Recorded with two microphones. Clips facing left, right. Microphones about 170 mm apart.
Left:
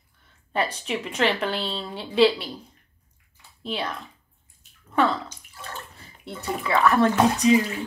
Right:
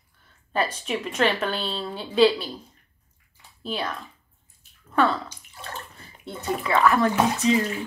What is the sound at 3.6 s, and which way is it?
Speech, 25° left (ahead or behind).